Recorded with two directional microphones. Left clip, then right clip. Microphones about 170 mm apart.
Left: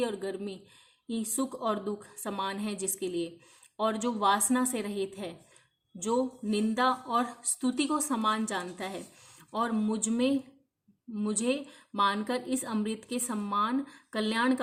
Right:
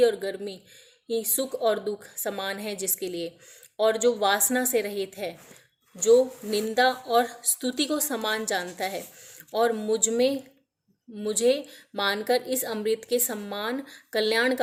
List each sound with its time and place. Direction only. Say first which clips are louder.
0.0 s a woman's voice: right 10 dB; 20° left (ahead or behind)